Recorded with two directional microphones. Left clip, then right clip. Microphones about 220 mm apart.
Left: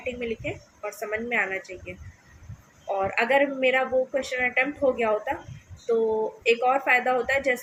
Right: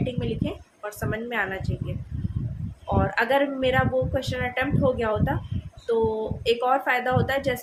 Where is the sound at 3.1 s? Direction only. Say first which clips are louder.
Left 1 dB; 15° right (ahead or behind).